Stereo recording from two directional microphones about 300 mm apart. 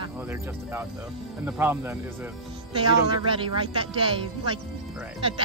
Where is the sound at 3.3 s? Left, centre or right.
Centre.